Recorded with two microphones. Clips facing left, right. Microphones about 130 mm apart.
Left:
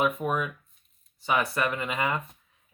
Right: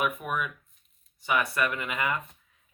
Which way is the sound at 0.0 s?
30° left (ahead or behind).